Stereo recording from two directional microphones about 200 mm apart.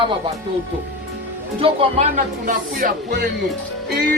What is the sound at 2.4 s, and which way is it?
Speech, 45° right (ahead or behind).